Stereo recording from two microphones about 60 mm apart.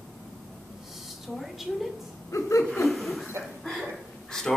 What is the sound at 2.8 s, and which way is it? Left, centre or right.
Chuckle, centre.